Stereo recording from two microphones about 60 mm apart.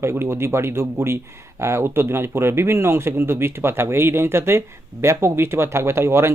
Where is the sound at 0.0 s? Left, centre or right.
Right.